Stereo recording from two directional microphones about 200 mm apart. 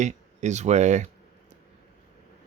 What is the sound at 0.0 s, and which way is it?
Speech, 35° right (ahead or behind).